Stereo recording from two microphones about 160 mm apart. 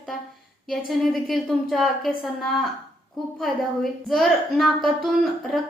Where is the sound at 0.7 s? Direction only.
Centre (ahead or behind).